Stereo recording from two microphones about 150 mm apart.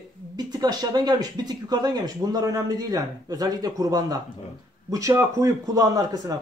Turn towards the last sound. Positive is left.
turn(degrees=-25)  # may be behind; listen again after turning